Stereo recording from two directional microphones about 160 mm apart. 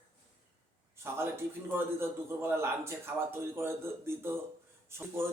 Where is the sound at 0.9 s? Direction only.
15° right (ahead or behind).